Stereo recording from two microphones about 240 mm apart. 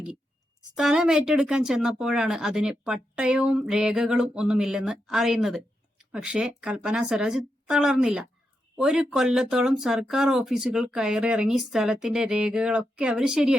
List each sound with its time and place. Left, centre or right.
0.8 s speech: centre